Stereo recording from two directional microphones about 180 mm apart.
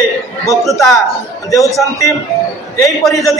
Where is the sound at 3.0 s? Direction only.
Centre (ahead or behind).